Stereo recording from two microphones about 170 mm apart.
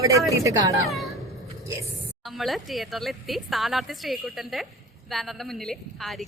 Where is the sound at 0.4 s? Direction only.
20° right (ahead or behind).